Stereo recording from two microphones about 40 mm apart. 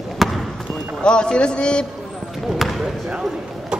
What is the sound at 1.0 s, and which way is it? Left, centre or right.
Speech, left.